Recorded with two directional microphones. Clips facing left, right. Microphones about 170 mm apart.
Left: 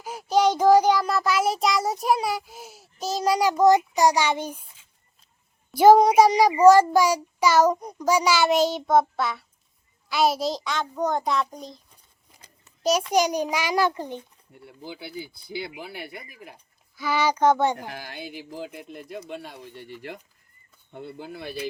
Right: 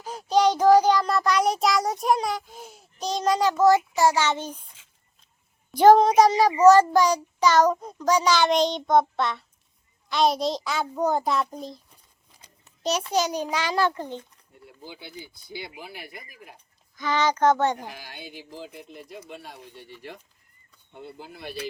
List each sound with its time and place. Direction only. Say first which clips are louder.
0.0 s child singing: even; 10° left (ahead or behind)
5.7 s child singing: left 1 dB; 10° left (ahead or behind)
10.1 s a child's voice: even; 5° left (ahead or behind)
12.6 s child singing: left 4 dB; 10° left (ahead or behind)
15.8 s speech: left 4 dB; 65° left (ahead or behind)
16.9 s child singing: even; 10° left (ahead or behind)
18.5 s speech: left 3 dB; 60° left (ahead or behind)
20.9 s speech: left 4 dB; 60° left (ahead or behind)